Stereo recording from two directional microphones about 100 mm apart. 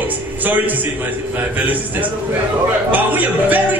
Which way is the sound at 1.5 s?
15° right (ahead or behind).